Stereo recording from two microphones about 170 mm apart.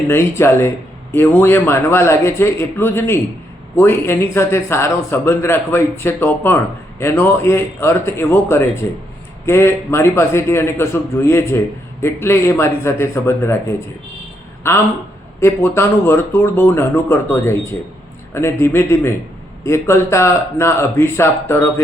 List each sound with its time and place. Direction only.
0.1 s speech: 15° left (ahead or behind)
15.4 s speech: 15° left (ahead or behind)